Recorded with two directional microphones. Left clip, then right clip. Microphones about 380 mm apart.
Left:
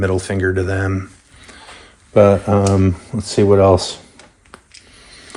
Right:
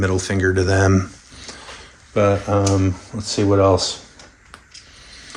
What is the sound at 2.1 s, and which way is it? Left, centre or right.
Speech, centre.